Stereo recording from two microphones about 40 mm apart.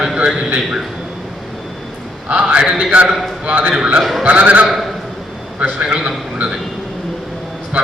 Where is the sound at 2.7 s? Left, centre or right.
Right.